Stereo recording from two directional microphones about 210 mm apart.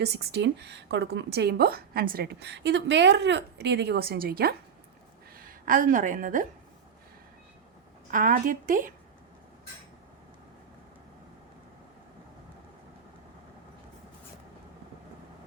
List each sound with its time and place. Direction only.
0.0 s a woman's voice: 50° right (ahead or behind)
8.1 s speech: 40° right (ahead or behind)